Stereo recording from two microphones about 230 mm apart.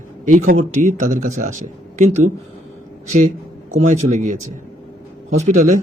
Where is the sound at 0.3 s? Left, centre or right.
Right.